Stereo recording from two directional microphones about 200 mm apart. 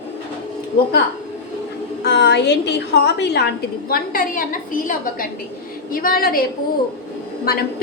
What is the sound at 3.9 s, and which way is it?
A woman's voice, 45° left (ahead or behind).